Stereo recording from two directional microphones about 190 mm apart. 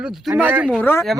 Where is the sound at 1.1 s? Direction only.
Centre (ahead or behind).